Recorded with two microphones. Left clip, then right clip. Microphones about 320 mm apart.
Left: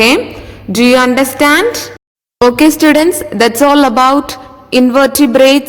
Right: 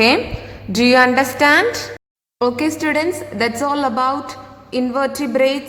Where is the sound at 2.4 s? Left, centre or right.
Left.